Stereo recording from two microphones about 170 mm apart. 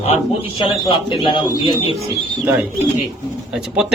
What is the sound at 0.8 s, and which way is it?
Speech, 30° left (ahead or behind).